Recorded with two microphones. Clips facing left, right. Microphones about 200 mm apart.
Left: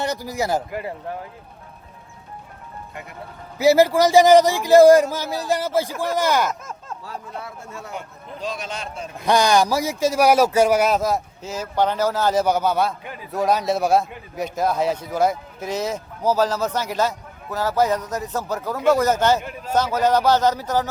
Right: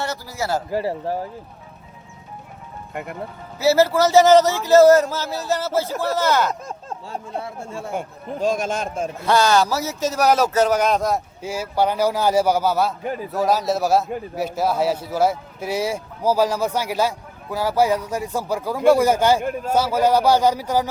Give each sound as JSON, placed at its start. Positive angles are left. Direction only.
{"t": 0.0, "sound": "a man's voice", "side_deg": 15}
{"t": 0.7, "sound": "speech", "side_deg": -30}
{"t": 2.9, "sound": "speech", "side_deg": -55}
{"t": 3.6, "sound": "a man's voice", "side_deg": 15}
{"t": 6.5, "sound": "speech", "side_deg": -30}
{"t": 7.9, "sound": "speech", "side_deg": -45}
{"t": 9.2, "sound": "a man's voice", "side_deg": 15}
{"t": 11.4, "sound": "speech", "side_deg": -10}
{"t": 13.0, "sound": "speech", "side_deg": -40}
{"t": 13.3, "sound": "a man's voice", "side_deg": 0}
{"t": 19.4, "sound": "speech", "side_deg": -50}
{"t": 19.7, "sound": "speech", "side_deg": -10}